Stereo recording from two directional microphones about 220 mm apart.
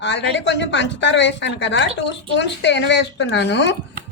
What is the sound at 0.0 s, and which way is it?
Speech, 55° left (ahead or behind).